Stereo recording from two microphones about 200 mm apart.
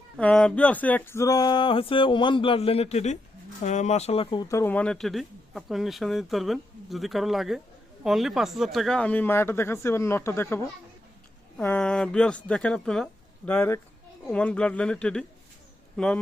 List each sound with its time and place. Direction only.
0.2 s a sound: 5° left (ahead or behind); by 3.2 s 35° left (ahead or behind)
3.6 s speech: 35° left (ahead or behind)
4.4 s speech: 10° left (ahead or behind)